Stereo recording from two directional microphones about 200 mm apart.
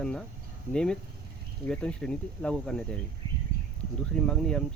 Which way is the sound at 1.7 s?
5° left (ahead or behind).